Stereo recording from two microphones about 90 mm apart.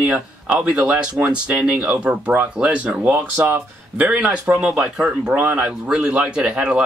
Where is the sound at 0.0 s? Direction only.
10° right (ahead or behind).